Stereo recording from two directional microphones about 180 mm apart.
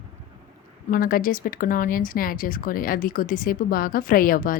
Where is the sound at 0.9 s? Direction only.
50° left (ahead or behind).